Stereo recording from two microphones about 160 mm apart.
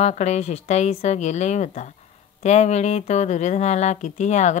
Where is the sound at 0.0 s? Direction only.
45° left (ahead or behind).